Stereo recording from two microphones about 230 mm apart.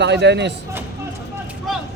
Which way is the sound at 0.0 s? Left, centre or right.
Right.